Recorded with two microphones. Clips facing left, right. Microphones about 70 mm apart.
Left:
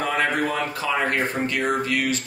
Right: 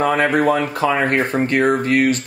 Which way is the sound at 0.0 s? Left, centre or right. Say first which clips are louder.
Right 7 dB; right.